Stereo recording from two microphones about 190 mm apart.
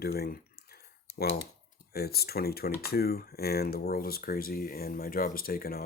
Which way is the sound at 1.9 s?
55° left (ahead or behind).